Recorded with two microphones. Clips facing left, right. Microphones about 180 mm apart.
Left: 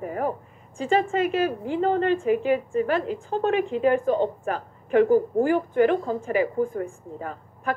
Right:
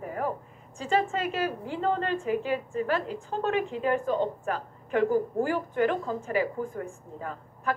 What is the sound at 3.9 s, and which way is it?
A woman's voice, 55° left (ahead or behind).